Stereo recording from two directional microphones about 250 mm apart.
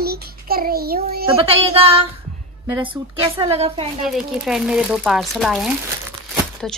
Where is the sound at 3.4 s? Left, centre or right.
Right.